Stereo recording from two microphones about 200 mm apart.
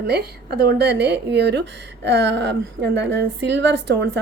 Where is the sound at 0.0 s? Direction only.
55° right (ahead or behind).